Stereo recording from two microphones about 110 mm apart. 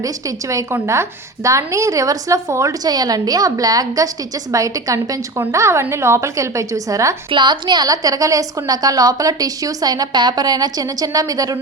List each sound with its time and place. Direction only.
0.0 s a woman's voice: 30° right (ahead or behind)
7.3 s a woman's voice: 50° right (ahead or behind)